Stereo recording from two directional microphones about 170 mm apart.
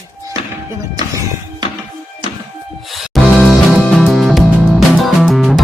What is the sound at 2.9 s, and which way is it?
Music, centre (ahead or behind).